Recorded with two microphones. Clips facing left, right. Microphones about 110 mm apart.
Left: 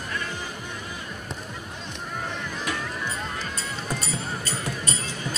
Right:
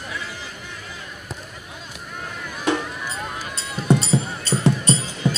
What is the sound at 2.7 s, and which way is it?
Music, 25° right (ahead or behind).